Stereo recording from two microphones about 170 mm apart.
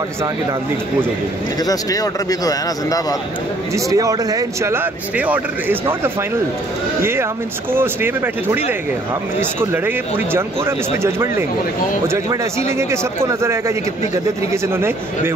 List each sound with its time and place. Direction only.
1.6 s a man's voice: 20° left (ahead or behind)
3.7 s speech: 20° right (ahead or behind)